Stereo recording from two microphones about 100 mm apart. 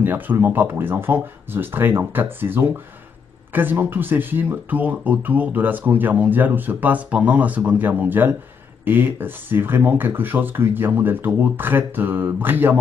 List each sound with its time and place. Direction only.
0.0 s speech: 20° right (ahead or behind)